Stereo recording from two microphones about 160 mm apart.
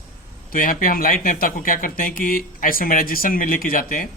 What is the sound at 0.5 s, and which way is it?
Speech, 60° left (ahead or behind).